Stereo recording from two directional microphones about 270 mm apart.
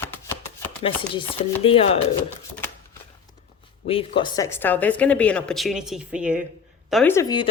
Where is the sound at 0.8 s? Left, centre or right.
Centre.